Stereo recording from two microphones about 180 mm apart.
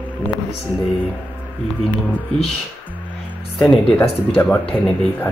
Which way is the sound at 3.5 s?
Centre (ahead or behind).